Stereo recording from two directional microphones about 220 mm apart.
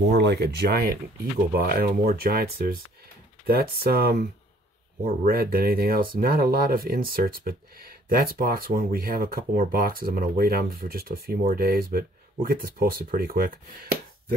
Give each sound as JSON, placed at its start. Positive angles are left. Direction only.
{"t": 0.1, "sound": "speech", "side_deg": -50}